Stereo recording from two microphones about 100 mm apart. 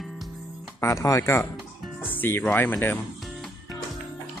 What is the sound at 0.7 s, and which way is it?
Speech, 30° left (ahead or behind).